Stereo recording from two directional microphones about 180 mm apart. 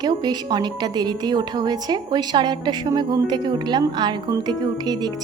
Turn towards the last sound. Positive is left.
turn(degrees=-20)  # may be behind; listen again after turning